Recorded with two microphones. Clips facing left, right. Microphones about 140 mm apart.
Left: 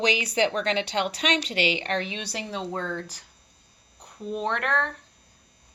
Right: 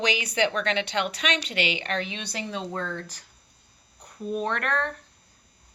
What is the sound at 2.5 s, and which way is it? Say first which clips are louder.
Speech: left 2 dB; 25° left (ahead or behind).